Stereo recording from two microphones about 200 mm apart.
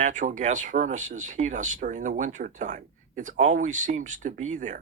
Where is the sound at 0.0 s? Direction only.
40° right (ahead or behind).